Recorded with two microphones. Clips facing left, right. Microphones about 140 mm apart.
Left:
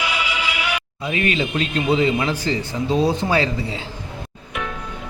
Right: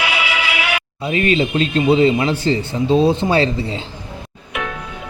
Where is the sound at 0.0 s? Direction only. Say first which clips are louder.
Right 3 dB; 75° right (ahead or behind).